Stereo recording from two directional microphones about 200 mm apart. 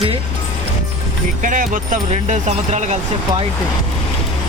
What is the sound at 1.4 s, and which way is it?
Speech, 40° right (ahead or behind).